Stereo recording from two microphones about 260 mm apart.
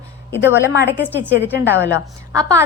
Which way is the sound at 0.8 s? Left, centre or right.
Left.